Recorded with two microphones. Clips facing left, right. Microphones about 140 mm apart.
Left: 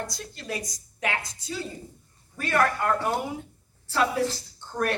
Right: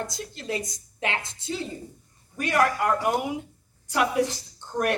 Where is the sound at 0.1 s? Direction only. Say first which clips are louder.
Right 3 dB; 20° right (ahead or behind).